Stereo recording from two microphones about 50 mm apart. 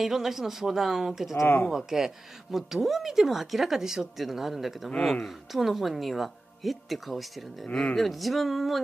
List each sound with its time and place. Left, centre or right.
0.0 s speech: centre
5.0 s speech: centre
5.5 s speech: centre
7.6 s speech: centre
7.9 s speech: centre